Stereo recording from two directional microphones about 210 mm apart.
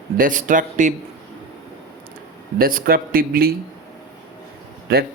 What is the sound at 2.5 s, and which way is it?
Speech, 45° right (ahead or behind).